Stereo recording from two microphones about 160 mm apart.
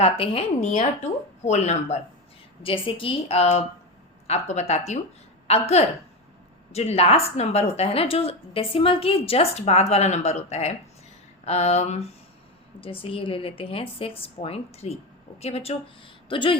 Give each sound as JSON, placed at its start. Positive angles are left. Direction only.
{"t": 0.0, "sound": "a woman's voice", "side_deg": 40}
{"t": 2.6, "sound": "a woman's voice", "side_deg": 35}